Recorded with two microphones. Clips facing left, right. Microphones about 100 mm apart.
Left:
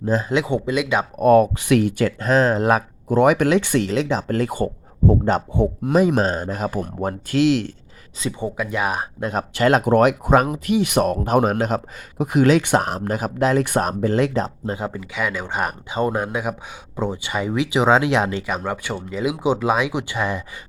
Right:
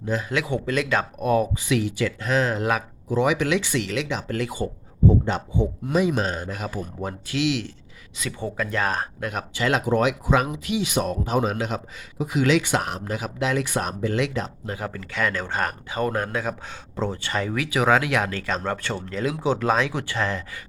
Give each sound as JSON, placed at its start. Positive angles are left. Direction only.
{"t": 0.0, "sound": "speech", "side_deg": 35}
{"t": 0.3, "sound": "speech", "side_deg": 25}
{"t": 1.2, "sound": "speech", "side_deg": 55}
{"t": 8.4, "sound": "speech", "side_deg": 15}
{"t": 9.2, "sound": "speech", "side_deg": 30}
{"t": 9.5, "sound": "speech", "side_deg": 50}
{"t": 14.8, "sound": "speech", "side_deg": 20}
{"t": 15.1, "sound": "speech", "side_deg": 10}